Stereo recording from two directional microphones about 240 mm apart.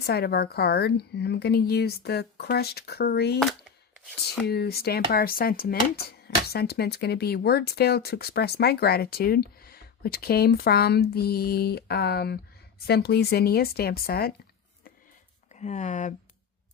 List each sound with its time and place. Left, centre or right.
0.0 s speech: left
4.4 s speech: left
15.5 s speech: left